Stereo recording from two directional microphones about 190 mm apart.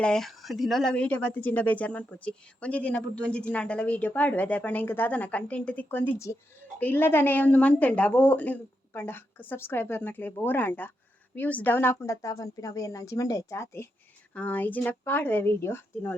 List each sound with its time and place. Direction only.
0.0 s speech: 5° left (ahead or behind)